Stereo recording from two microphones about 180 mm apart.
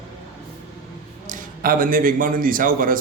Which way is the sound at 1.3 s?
50° right (ahead or behind).